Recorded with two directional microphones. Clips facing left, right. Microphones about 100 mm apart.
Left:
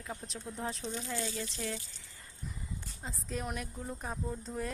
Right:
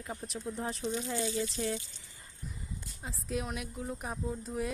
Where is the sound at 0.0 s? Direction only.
5° right (ahead or behind).